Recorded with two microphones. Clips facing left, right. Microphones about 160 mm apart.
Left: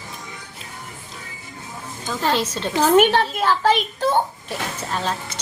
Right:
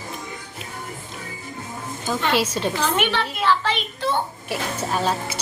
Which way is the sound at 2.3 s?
10° right (ahead or behind).